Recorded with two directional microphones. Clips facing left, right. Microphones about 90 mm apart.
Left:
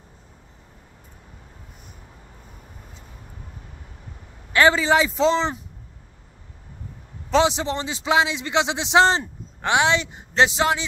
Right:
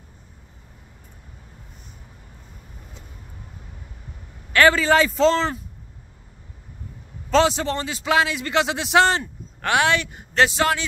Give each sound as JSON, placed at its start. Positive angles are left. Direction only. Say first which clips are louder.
{"t": 4.5, "sound": "a man's voice", "louder": "right 1 dB", "side_deg": 20}
{"t": 7.2, "sound": "a man's voice", "louder": "right 1 dB", "side_deg": 20}